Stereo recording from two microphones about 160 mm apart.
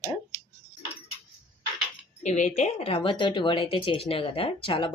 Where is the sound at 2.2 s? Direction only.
50° left (ahead or behind); by 4.9 s 35° left (ahead or behind).